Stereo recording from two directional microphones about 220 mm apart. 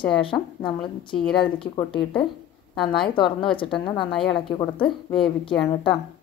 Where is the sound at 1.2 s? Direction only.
5° left (ahead or behind).